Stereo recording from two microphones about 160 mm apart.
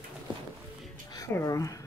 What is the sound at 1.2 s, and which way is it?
Speech, 20° left (ahead or behind).